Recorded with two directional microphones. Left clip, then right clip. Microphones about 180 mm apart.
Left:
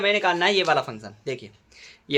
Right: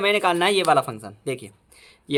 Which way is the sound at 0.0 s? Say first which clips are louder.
Right 1 dB; 35° right (ahead or behind).